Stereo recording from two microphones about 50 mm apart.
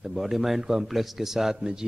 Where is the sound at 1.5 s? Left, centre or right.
Centre.